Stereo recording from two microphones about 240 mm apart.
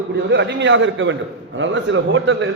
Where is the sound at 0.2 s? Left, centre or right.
Right.